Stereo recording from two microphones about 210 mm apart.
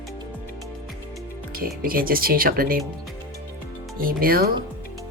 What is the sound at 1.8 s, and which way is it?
Speech, 45° right (ahead or behind).